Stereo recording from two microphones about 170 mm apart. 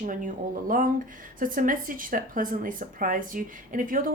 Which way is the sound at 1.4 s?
55° right (ahead or behind).